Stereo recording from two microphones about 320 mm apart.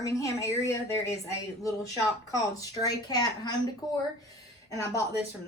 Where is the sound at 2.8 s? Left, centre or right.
Centre.